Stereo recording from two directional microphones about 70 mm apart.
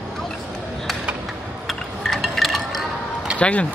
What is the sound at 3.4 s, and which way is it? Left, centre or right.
Speech, centre.